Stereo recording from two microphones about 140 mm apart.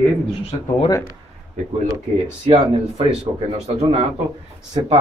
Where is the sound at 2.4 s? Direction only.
45° right (ahead or behind).